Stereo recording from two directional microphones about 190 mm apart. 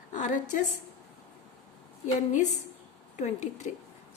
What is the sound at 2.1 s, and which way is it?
A woman's voice, 40° left (ahead or behind).